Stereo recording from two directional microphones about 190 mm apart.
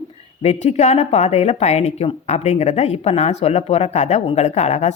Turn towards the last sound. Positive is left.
turn(degrees=35)  # may be behind; listen again after turning